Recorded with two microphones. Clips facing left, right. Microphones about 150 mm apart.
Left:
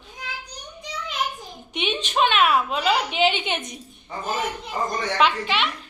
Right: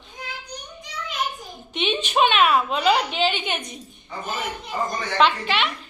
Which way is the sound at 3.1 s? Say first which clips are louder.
Left 2 dB; 15° left (ahead or behind).